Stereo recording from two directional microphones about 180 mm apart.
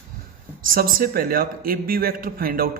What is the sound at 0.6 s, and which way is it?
A man's voice, 50° right (ahead or behind).